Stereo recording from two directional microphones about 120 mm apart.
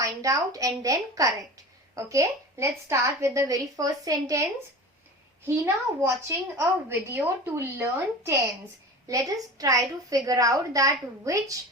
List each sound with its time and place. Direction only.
0.0 s a woman's voice: 30° right (ahead or behind)
5.6 s a woman's voice: 20° right (ahead or behind)
9.0 s a woman's voice: 30° right (ahead or behind)